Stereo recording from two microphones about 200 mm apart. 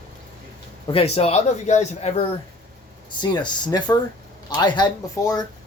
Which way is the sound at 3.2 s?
20° left (ahead or behind).